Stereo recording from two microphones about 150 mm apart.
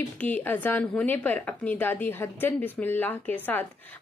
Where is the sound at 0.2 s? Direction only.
10° left (ahead or behind).